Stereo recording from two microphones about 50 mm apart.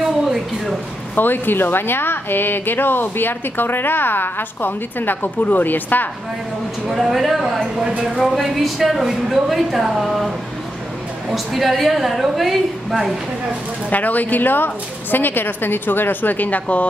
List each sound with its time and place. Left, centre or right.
1.1 s a woman's voice: left
6.9 s a woman's voice: centre
11.3 s a woman's voice: centre
13.8 s a woman's voice: left